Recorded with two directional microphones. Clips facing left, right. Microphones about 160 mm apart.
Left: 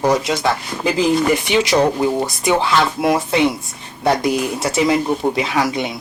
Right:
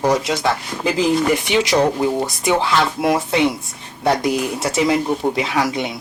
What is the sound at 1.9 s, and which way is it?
Speech, 35° left (ahead or behind).